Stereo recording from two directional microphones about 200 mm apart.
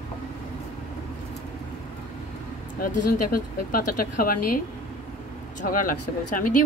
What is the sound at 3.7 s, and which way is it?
A woman's voice, 45° left (ahead or behind).